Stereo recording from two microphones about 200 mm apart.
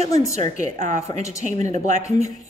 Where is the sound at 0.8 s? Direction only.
35° right (ahead or behind).